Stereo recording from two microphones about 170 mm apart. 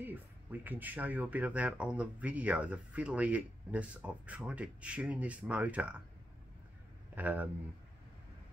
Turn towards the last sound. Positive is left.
turn(degrees=-10)  # may be behind; listen again after turning